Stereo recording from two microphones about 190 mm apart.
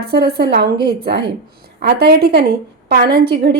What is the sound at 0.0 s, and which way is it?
A woman's voice, 55° right (ahead or behind).